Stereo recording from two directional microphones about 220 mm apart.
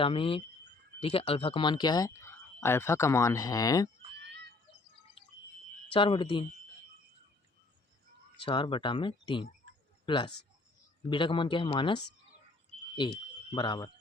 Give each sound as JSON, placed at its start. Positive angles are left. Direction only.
{"t": 0.0, "sound": "speech", "side_deg": 25}
{"t": 5.9, "sound": "speech", "side_deg": 25}
{"t": 8.4, "sound": "speech", "side_deg": 25}
{"t": 13.0, "sound": "speech", "side_deg": 20}